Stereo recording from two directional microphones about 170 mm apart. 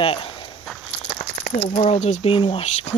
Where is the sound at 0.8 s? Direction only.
40° left (ahead or behind).